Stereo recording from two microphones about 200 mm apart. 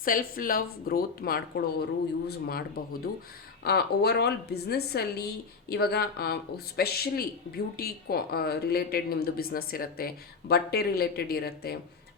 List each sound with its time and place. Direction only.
0.0 s a woman's voice: 45° left (ahead or behind)